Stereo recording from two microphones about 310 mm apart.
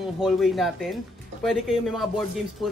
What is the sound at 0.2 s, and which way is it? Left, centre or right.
Speech, centre.